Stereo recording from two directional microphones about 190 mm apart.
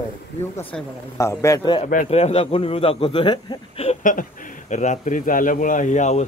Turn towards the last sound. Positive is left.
turn(degrees=40)  # may be behind; listen again after turning